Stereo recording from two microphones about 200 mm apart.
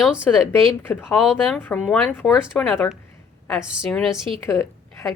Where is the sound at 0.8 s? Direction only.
10° left (ahead or behind).